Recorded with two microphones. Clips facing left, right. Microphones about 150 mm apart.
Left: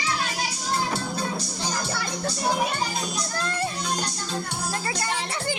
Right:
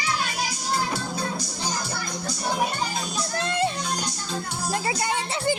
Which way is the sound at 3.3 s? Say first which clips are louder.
Right 5 dB; 20° right (ahead or behind).